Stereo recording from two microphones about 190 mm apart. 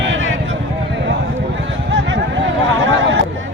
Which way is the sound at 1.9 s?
75° right (ahead or behind).